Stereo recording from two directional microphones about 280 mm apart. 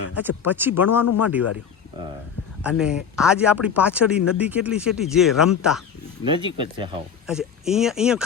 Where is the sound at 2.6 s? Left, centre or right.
Centre.